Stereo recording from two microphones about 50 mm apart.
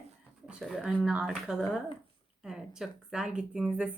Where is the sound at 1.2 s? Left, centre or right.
Centre.